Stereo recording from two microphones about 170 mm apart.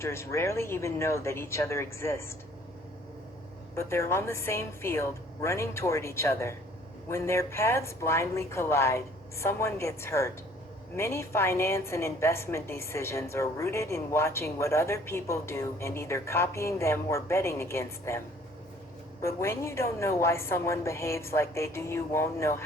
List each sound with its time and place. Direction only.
0.0 s a woman's voice: 15° left (ahead or behind)
3.8 s a woman's voice: 15° left (ahead or behind)
19.2 s a woman's voice: 15° left (ahead or behind)